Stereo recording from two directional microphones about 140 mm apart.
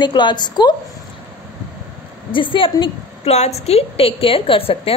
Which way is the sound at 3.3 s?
50° left (ahead or behind).